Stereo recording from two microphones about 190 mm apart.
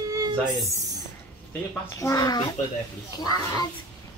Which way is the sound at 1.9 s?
15° left (ahead or behind).